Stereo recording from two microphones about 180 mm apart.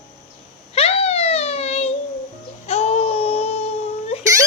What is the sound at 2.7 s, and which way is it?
Baby cry, 35° left (ahead or behind).